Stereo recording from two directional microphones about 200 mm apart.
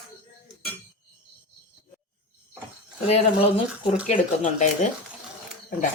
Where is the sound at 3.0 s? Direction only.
30° left (ahead or behind).